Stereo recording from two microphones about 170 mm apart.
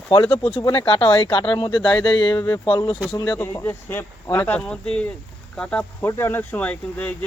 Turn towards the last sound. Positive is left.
turn(degrees=10)  # may be behind; listen again after turning